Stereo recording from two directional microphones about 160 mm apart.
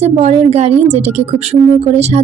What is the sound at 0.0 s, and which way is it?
Speech, 45° right (ahead or behind).